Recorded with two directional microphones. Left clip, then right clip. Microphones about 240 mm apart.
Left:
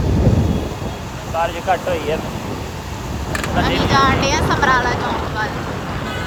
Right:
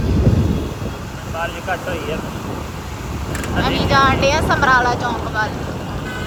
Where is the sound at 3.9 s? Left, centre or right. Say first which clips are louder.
Right 2 dB; centre.